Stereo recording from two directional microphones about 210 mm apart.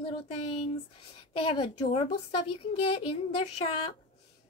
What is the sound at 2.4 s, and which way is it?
Speech, 90° left.